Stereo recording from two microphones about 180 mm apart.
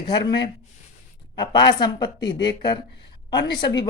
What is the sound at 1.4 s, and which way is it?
Speech, 25° left (ahead or behind).